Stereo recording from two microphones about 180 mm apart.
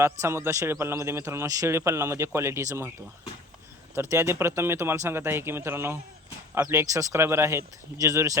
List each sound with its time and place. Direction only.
0.0 s speech: 15° right (ahead or behind)
4.1 s speech: 15° right (ahead or behind)